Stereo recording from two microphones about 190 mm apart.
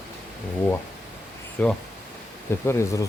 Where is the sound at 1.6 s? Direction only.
10° left (ahead or behind).